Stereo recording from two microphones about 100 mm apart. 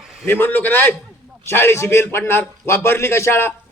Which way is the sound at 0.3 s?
20° left (ahead or behind).